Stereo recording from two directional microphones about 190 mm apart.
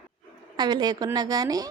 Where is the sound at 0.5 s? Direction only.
20° right (ahead or behind).